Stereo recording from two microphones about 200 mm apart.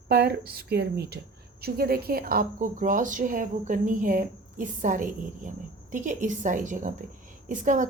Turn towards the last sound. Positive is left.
turn(degrees=-40)  # may be behind; listen again after turning